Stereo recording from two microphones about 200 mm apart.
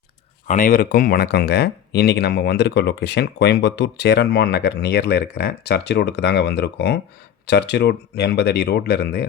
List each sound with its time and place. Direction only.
0.4 s speech: 40° left (ahead or behind)